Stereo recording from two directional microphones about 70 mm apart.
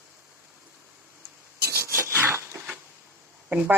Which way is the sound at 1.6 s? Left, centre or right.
Right.